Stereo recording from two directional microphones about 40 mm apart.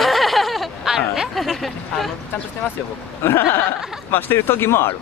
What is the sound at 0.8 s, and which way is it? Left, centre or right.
Speech, centre.